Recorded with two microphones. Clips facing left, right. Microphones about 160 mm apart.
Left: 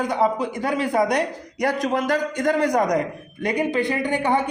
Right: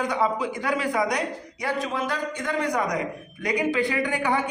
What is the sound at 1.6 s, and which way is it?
A man's voice, 40° left (ahead or behind).